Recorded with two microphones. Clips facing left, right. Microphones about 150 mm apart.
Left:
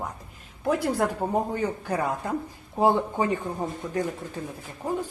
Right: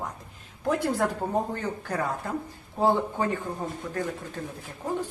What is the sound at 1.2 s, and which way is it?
A woman's voice, 10° left (ahead or behind).